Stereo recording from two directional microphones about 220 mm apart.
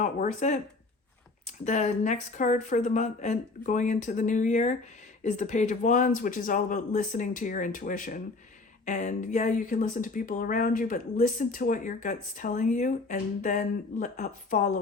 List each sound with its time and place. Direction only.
0.0 s speech: 35° left (ahead or behind)